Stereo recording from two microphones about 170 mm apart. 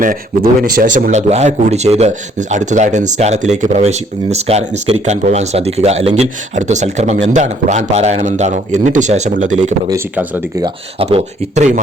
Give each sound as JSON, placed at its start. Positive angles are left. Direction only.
{"t": 0.0, "sound": "a man's voice", "side_deg": -55}
{"t": 9.9, "sound": "speech", "side_deg": -10}
{"t": 11.0, "sound": "a man's voice", "side_deg": -40}